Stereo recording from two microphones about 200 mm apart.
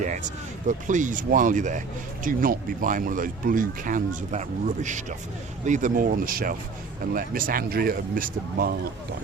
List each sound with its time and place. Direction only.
0.7 s speech: 40° right (ahead or behind)